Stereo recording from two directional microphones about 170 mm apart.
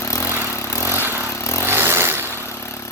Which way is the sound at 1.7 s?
15° right (ahead or behind).